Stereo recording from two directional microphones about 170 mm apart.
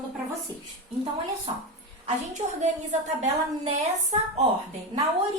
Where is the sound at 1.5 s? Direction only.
30° right (ahead or behind).